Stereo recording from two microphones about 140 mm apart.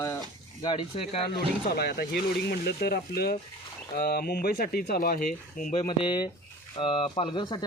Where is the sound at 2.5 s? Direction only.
90° left; by 5.8 s 70° left (ahead or behind).